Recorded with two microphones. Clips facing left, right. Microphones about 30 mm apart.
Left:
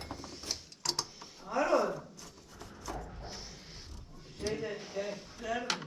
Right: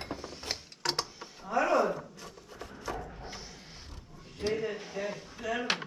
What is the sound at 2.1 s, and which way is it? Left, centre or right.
Wood, right.